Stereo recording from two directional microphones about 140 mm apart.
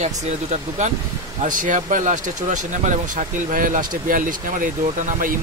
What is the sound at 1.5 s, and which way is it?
Speech, 70° right (ahead or behind).